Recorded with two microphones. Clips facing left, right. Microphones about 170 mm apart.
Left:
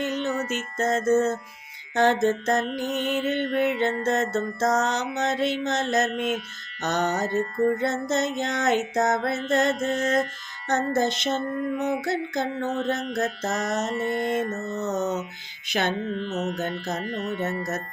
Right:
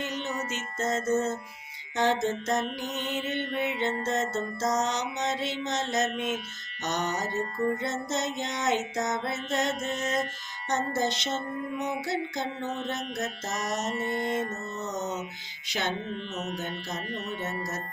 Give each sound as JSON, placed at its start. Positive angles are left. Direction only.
{"t": 0.0, "sound": "music", "side_deg": 55}